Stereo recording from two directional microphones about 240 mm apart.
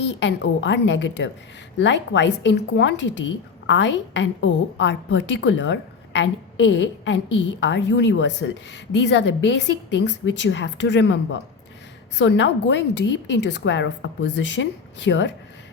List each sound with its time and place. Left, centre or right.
0.1 s a woman's voice: left